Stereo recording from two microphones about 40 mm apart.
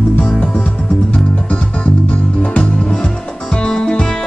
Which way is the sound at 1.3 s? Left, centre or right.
Left.